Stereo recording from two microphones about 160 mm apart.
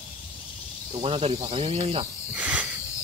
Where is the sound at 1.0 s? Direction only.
35° right (ahead or behind).